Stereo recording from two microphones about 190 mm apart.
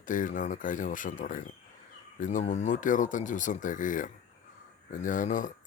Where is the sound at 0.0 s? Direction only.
45° left (ahead or behind).